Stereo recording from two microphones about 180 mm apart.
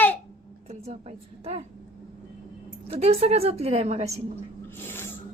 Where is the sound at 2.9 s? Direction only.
35° right (ahead or behind).